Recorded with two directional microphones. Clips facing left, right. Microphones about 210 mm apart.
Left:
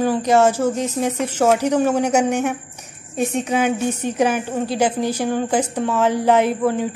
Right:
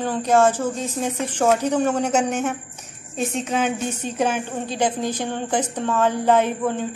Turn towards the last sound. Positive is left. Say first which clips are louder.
# left 4 dB
turn(degrees=10)  # may be behind; listen again after turning